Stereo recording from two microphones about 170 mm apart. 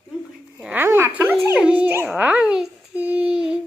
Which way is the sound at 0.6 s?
10° right (ahead or behind).